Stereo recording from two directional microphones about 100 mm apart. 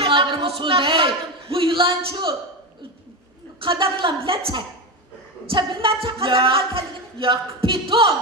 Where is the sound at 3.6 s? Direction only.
55° right (ahead or behind).